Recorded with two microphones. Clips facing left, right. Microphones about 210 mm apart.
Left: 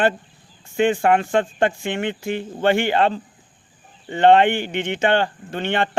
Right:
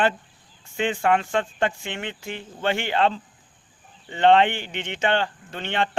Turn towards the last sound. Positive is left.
turn(degrees=50)  # may be behind; listen again after turning